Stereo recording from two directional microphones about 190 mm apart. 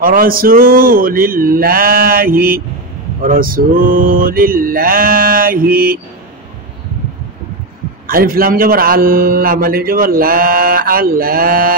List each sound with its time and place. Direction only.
0.0 s a man's voice: 50° right (ahead or behind)
8.1 s a man's voice: 50° right (ahead or behind)